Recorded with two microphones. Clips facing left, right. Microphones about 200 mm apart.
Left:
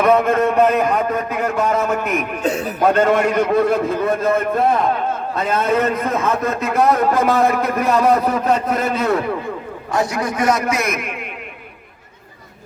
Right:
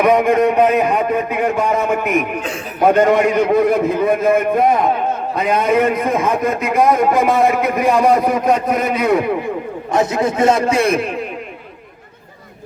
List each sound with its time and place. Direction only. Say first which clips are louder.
0.0 s a man's voice: right 2 dB; 15° right (ahead or behind); by 11.3 s 30° right (ahead or behind)